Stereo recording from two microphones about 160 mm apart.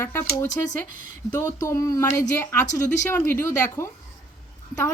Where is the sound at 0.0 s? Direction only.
15° left (ahead or behind).